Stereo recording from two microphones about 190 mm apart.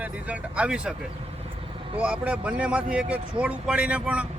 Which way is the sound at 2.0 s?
5° right (ahead or behind).